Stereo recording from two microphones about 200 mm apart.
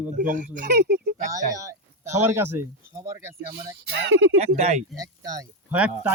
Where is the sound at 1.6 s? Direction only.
15° right (ahead or behind).